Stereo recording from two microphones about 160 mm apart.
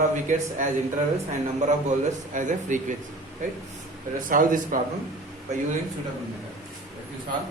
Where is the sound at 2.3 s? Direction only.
50° right (ahead or behind).